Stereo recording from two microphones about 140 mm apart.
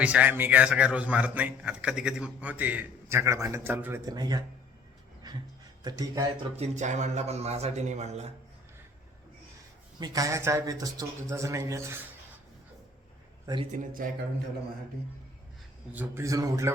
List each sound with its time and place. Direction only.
0.0 s a man's voice: 10° right (ahead or behind)
4.0 s speech: 30° right (ahead or behind)
5.8 s speech: 25° right (ahead or behind)
6.6 s a man's voice: 55° right (ahead or behind)
10.0 s speech: 25° right (ahead or behind)
13.4 s speech: 35° right (ahead or behind)
13.7 s speech: 70° right (ahead or behind)
15.9 s speech: 15° right (ahead or behind)